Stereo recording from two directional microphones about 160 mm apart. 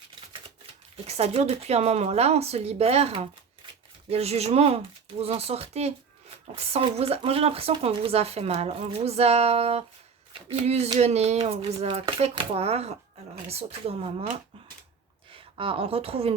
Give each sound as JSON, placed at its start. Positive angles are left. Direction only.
{"t": 1.0, "sound": "speech", "side_deg": -40}